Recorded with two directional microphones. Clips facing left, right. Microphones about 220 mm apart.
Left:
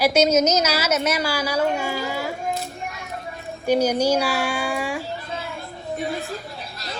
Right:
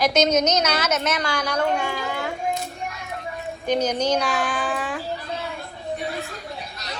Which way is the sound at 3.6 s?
10° left (ahead or behind).